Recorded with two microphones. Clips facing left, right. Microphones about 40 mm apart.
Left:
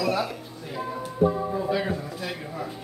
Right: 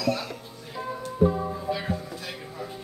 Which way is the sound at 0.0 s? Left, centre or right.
Centre.